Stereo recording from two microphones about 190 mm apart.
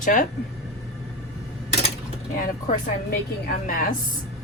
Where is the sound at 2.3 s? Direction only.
45° left (ahead or behind).